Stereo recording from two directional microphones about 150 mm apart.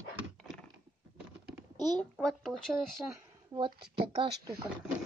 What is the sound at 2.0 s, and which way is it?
Speech, centre (ahead or behind).